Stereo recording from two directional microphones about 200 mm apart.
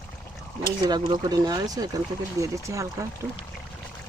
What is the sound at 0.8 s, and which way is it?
Speech, 20° right (ahead or behind).